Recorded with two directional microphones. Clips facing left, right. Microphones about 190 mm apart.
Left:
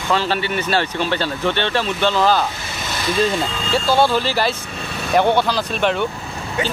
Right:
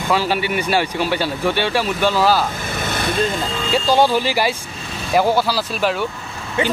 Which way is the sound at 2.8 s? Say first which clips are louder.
Right 2 dB; 55° right (ahead or behind).